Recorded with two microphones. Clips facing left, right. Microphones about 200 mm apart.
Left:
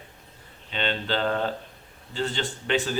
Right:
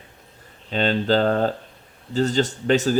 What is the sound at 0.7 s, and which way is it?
Speech, 40° right (ahead or behind).